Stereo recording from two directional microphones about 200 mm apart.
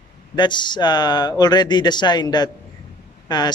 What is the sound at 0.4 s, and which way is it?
Speech, 20° left (ahead or behind).